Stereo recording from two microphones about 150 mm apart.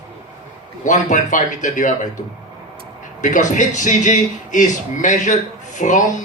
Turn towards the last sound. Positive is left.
turn(degrees=55)  # may be behind; listen again after turning